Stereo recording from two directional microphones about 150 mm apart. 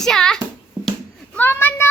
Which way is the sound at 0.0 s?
5° left (ahead or behind).